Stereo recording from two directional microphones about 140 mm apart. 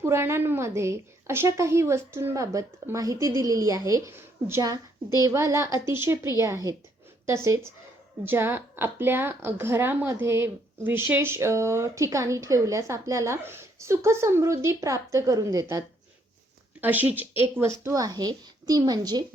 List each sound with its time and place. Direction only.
0.0 s a woman's voice: 20° right (ahead or behind)
16.8 s a woman's voice: 10° right (ahead or behind); by 19.2 s 30° right (ahead or behind)